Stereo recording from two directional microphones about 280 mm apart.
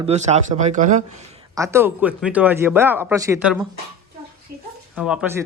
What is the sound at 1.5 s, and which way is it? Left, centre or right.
Speech, centre.